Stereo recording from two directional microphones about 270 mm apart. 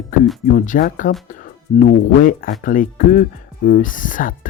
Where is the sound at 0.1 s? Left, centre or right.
Left.